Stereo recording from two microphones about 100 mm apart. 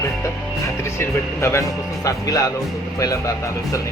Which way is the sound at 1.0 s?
25° left (ahead or behind).